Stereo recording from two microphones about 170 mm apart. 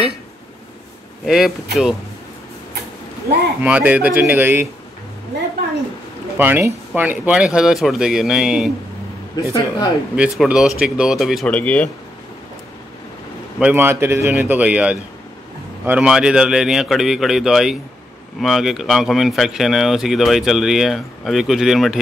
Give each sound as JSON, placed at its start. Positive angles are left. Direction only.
{"t": 1.2, "sound": "speech", "side_deg": 0}
{"t": 3.6, "sound": "speech", "side_deg": -10}
{"t": 6.3, "sound": "speech", "side_deg": -10}
{"t": 9.3, "sound": "speech", "side_deg": 25}
{"t": 10.1, "sound": "speech", "side_deg": -5}
{"t": 13.6, "sound": "speech", "side_deg": -10}